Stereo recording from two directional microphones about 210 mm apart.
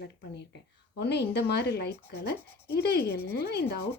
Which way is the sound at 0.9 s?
50° left (ahead or behind).